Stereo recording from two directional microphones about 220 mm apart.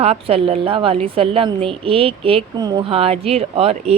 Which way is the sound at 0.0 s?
25° right (ahead or behind).